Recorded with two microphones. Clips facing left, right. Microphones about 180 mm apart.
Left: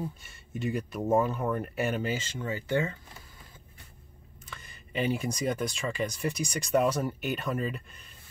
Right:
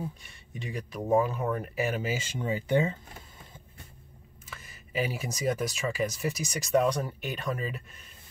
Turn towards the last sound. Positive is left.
turn(degrees=0)  # may be behind; listen again after turning